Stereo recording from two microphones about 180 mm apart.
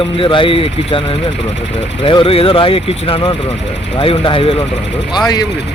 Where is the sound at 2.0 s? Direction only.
30° left (ahead or behind).